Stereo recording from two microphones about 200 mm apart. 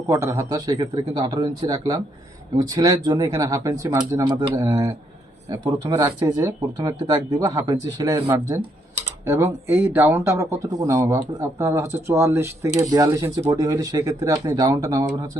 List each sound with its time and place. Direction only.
0.1 s speech: 15° right (ahead or behind)